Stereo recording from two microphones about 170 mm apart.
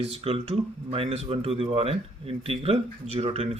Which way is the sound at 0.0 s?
35° right (ahead or behind).